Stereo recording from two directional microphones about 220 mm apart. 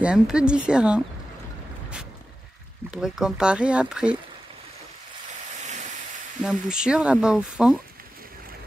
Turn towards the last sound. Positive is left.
turn(degrees=-5)  # may be behind; listen again after turning